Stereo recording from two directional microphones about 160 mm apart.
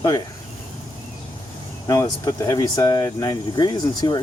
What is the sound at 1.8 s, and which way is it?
Speech, 20° left (ahead or behind).